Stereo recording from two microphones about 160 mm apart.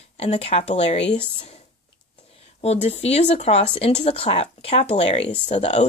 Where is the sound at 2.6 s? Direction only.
40° left (ahead or behind).